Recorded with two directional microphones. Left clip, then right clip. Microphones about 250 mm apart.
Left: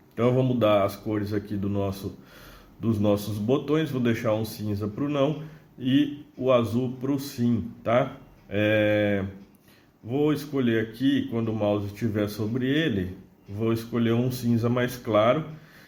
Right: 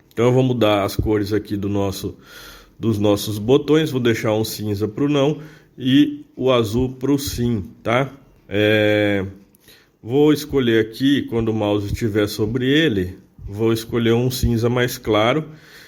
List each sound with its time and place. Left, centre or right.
0.2 s speech: right